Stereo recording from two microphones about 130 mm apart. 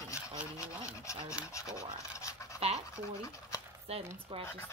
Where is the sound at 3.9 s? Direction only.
45° right (ahead or behind).